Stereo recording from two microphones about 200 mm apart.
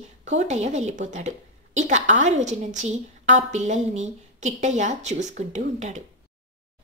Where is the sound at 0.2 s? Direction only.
35° right (ahead or behind).